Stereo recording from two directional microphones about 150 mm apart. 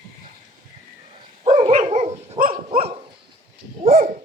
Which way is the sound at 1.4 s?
40° right (ahead or behind).